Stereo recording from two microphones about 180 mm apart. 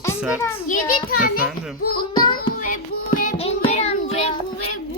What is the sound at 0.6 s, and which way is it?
Speech, 50° left (ahead or behind).